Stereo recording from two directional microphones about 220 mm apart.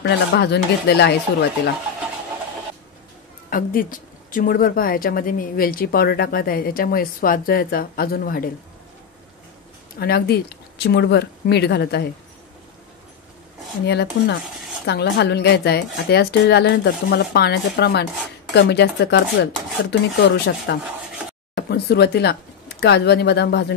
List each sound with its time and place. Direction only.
0.0 s speech: 50° left (ahead or behind)
3.4 s speech: 40° left (ahead or behind)
9.9 s speech: 45° left (ahead or behind)
13.8 s speech: 50° left (ahead or behind)